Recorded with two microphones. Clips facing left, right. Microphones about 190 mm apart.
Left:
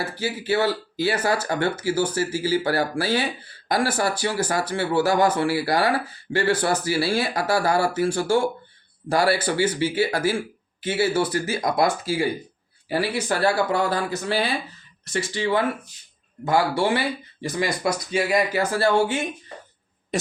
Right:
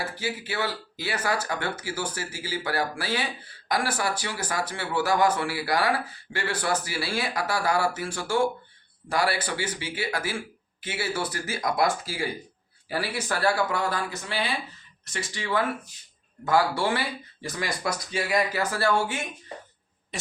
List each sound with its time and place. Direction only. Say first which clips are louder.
0.2 s speech: left 10 dB; 30° left (ahead or behind)
15.1 s speech: left 6 dB; 30° left (ahead or behind)